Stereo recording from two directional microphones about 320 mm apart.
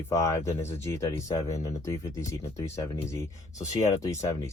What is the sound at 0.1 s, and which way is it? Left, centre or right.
Speech, centre.